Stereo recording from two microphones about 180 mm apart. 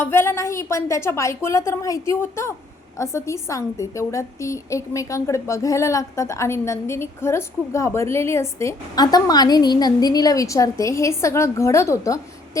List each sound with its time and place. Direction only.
0.0 s a woman's voice: 15° left (ahead or behind)